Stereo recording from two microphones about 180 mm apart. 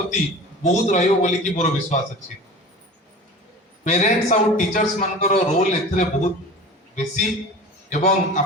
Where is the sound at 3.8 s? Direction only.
40° left (ahead or behind).